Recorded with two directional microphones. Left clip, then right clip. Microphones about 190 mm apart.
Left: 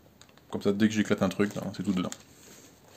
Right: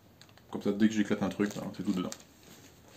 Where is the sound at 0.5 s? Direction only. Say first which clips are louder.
Left 3 dB; 60° left (ahead or behind).